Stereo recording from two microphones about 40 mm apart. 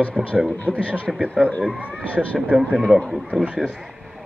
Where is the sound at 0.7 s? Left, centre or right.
Right.